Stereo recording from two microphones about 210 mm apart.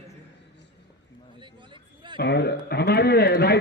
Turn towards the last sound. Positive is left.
turn(degrees=50)  # may be behind; listen again after turning